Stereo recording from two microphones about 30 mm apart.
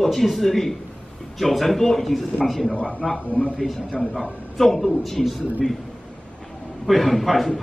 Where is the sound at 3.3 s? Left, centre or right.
Left.